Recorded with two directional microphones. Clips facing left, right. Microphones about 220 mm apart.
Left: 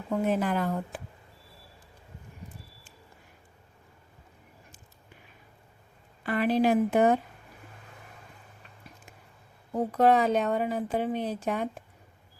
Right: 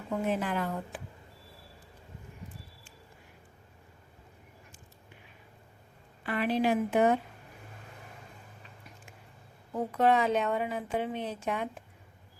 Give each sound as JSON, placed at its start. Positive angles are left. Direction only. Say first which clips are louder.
{"t": 0.3, "sound": "a woman's voice", "louder": "left 4 dB", "side_deg": 40}
{"t": 6.2, "sound": "a woman's voice", "louder": "left 4 dB", "side_deg": 45}
{"t": 9.7, "sound": "a woman's voice", "louder": "left 3 dB", "side_deg": 40}